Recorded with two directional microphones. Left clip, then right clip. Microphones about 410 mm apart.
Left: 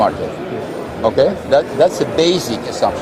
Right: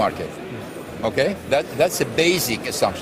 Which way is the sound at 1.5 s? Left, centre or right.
Right.